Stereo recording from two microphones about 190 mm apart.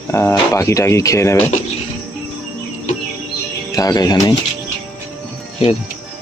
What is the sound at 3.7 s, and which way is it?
Speech, 20° left (ahead or behind).